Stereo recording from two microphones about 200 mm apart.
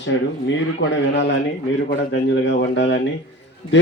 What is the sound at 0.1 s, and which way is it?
Speech, 70° left (ahead or behind).